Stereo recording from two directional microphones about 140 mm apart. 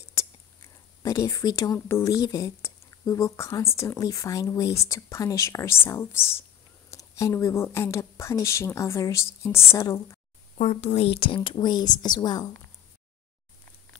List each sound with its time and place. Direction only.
0.2 s whispering: 20° left (ahead or behind)
1.0 s speech: 25° left (ahead or behind)
10.6 s a woman's voice: 55° left (ahead or behind); by 12.4 s 30° left (ahead or behind)